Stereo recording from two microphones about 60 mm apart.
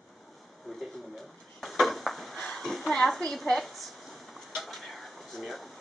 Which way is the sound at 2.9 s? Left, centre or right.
Centre.